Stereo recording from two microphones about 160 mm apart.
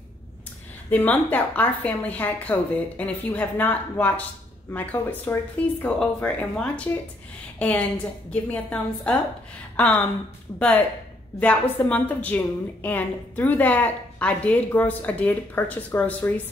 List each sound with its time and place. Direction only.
0.8 s a woman's voice: 10° left (ahead or behind)